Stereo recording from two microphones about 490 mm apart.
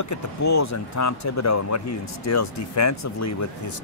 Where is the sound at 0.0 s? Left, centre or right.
Left.